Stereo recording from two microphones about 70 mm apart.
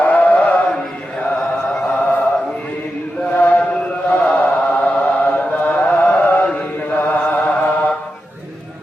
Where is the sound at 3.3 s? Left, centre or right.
Left.